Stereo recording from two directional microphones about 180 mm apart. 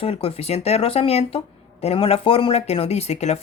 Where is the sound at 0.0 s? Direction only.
30° left (ahead or behind).